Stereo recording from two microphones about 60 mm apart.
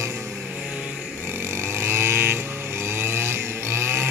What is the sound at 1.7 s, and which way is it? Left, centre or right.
Vehicle, right.